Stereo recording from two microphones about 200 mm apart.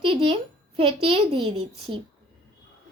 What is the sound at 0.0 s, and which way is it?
A child's voice, 25° right (ahead or behind).